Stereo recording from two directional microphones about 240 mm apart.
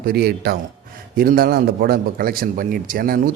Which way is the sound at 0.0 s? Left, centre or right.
Right.